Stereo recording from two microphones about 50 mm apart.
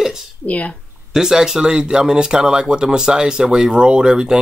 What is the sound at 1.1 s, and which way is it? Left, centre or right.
Speech, centre.